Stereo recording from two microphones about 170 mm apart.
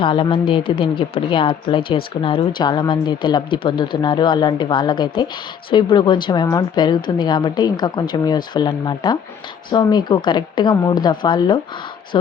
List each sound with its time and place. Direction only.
0.0 s a woman's voice: 30° left (ahead or behind)